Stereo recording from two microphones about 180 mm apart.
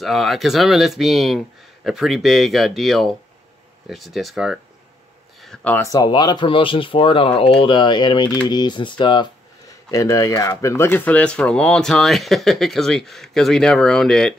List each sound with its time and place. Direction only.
0.0 s speech: centre (ahead or behind)